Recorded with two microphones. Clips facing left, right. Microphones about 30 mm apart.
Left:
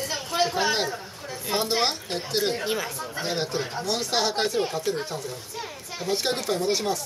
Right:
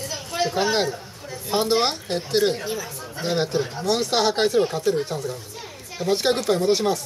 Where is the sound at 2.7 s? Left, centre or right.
Left.